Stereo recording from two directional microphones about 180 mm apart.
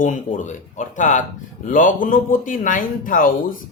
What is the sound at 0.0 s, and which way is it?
A man's voice, 45° left (ahead or behind).